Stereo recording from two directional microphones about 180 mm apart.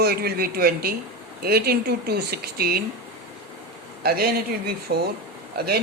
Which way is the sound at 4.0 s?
60° right (ahead or behind).